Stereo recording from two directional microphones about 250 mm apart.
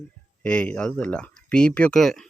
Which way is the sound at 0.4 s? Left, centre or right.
Centre.